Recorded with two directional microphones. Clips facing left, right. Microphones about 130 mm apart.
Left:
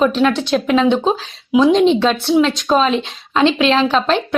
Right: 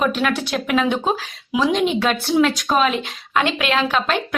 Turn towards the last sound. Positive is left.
turn(degrees=25)  # may be behind; listen again after turning